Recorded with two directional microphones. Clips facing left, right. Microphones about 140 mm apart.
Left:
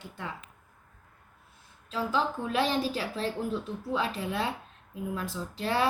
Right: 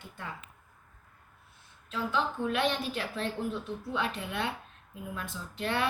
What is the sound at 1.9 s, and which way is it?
A woman's voice, 35° left (ahead or behind).